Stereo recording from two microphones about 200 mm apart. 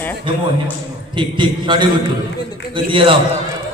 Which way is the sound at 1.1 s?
25° right (ahead or behind).